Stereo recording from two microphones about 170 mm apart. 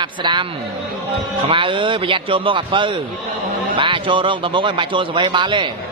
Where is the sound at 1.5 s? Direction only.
30° right (ahead or behind).